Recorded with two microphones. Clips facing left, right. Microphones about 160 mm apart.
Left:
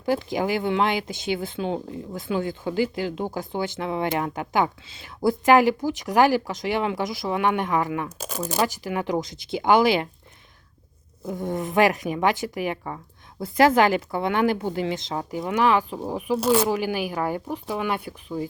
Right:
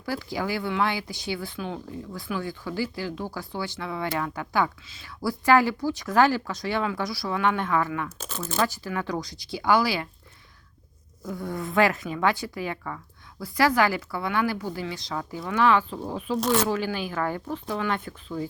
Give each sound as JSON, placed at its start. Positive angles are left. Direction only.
{"t": 0.0, "sound": "speech", "side_deg": 20}
{"t": 11.2, "sound": "speech", "side_deg": 25}